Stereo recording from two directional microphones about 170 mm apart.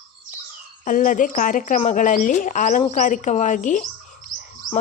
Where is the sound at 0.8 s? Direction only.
50° left (ahead or behind).